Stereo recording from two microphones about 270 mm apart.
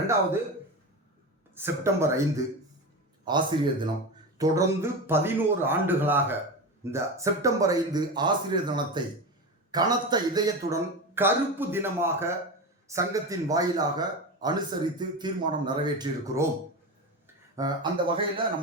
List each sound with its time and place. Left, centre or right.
1.5 s a man's voice: centre